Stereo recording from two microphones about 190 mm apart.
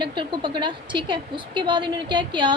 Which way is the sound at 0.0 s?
25° right (ahead or behind).